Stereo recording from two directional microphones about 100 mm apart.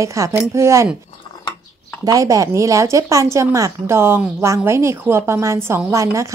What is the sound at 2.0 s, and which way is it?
Speech, 35° right (ahead or behind).